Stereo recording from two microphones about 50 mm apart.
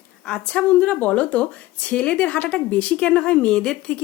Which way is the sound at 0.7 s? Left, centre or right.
Left.